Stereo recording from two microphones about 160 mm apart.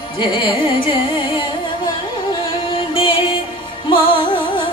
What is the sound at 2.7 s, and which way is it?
Music, 30° left (ahead or behind).